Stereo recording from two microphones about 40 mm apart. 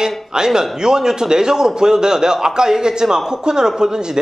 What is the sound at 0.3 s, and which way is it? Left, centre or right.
A man's voice, centre.